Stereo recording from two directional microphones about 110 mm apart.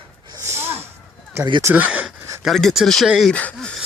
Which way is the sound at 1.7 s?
15° right (ahead or behind).